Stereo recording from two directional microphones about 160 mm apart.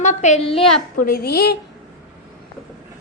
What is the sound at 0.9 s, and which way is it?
Speech, 70° left (ahead or behind).